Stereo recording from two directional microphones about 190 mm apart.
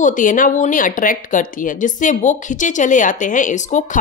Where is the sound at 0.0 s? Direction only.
45° left (ahead or behind).